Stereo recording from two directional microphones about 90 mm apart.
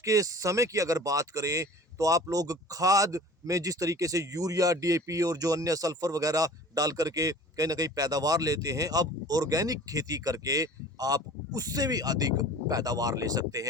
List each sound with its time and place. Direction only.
0.0 s speech: 40° right (ahead or behind)